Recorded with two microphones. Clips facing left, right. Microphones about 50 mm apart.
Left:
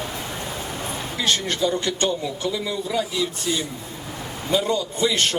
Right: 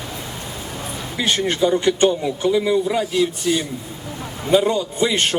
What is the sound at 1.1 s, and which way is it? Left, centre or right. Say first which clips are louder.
A man's voice: right 4 dB; right.